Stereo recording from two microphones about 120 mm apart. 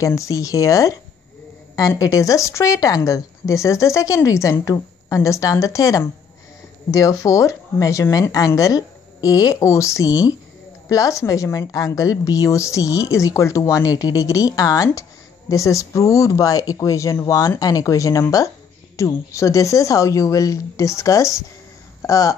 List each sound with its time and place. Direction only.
0.0 s a woman's voice: 25° left (ahead or behind)